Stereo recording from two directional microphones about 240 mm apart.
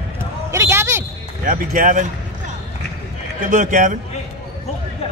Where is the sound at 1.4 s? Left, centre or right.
Right.